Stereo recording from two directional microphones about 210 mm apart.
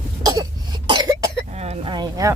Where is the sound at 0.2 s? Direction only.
15° right (ahead or behind).